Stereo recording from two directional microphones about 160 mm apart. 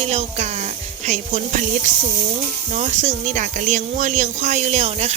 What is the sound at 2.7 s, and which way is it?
Speech, 45° right (ahead or behind).